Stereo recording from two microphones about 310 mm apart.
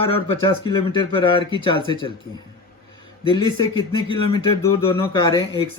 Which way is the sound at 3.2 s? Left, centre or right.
Centre.